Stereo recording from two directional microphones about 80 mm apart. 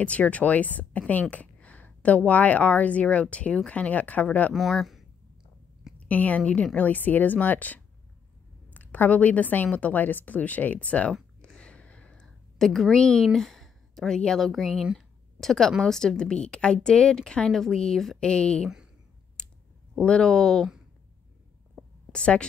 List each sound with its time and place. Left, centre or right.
0.0 s a woman's voice: centre
4.6 s speech: centre
5.9 s a woman's voice: centre
11.4 s a sound: centre
15.8 s a woman's voice: centre
19.4 s clicking: centre
20.0 s a woman's voice: centre
22.1 s a woman's voice: centre